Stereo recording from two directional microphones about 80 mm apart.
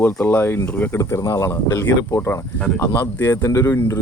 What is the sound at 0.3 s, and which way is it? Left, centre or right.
Speech, left.